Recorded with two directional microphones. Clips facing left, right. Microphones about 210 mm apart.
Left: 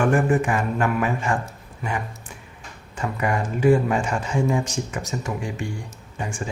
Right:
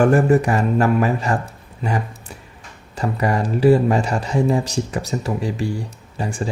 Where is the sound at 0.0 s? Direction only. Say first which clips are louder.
Right 5 dB; 40° right (ahead or behind).